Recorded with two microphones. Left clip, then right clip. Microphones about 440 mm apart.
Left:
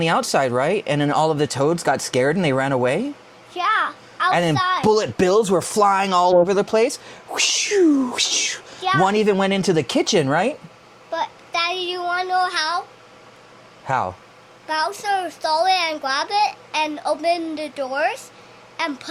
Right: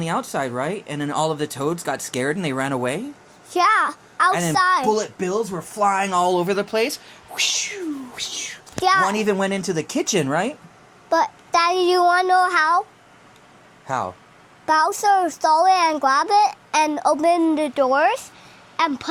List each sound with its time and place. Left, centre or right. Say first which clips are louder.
0.0 s speech: left 6 dB; left
3.5 s a sound: right 3 dB; right
4.5 s a child's voice: right 3 dB; right
4.9 s speech: left 5 dB; left
7.3 s speech: left 5 dB; left
9.0 s speech: left 3 dB; left
11.1 s a child's voice: right 6 dB; right
13.8 s speech: left 3 dB; left
14.7 s a child's voice: right 5 dB; right